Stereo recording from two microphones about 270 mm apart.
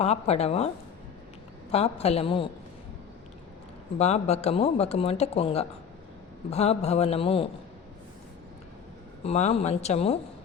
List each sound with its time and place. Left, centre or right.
0.0 s speech: left
1.7 s speech: left
3.9 s speech: left
9.2 s speech: left